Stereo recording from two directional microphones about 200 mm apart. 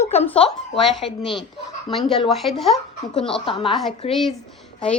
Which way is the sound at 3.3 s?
25° left (ahead or behind).